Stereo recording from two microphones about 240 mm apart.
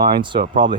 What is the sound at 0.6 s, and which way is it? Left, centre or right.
Speech, right.